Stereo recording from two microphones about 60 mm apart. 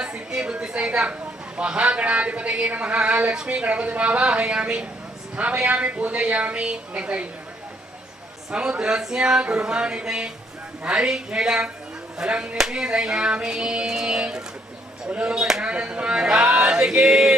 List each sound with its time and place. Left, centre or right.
0.0 s a woman's voice: centre
8.5 s music: centre